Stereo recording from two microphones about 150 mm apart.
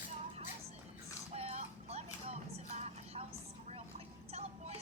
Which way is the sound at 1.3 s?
45° right (ahead or behind).